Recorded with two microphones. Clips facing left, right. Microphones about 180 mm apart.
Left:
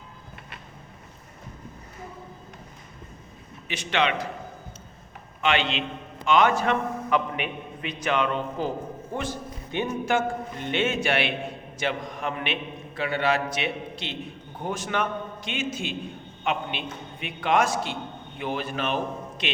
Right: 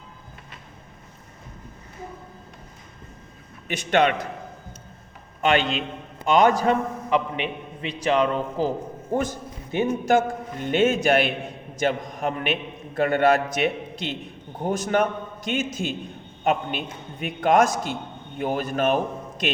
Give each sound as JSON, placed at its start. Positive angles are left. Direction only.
{"t": 3.7, "sound": "a man's voice", "side_deg": -45}
{"t": 5.4, "sound": "a man's voice", "side_deg": -45}
{"t": 9.1, "sound": "a man's voice", "side_deg": -45}